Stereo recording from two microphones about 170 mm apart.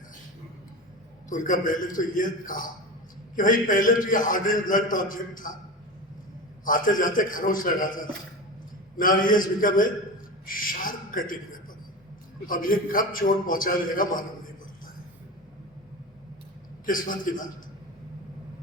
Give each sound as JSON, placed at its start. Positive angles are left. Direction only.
{"t": 1.3, "sound": "a man's voice", "side_deg": 50}
{"t": 6.7, "sound": "a man's voice", "side_deg": 55}
{"t": 16.8, "sound": "a man's voice", "side_deg": 55}